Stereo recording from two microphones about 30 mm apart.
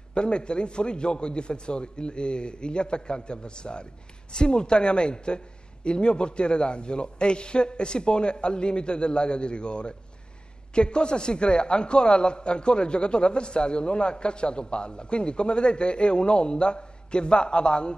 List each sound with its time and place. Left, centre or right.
0.1 s a man's voice: left